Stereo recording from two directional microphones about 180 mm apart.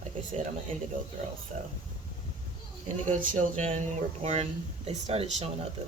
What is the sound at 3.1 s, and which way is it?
Speech, 45° right (ahead or behind).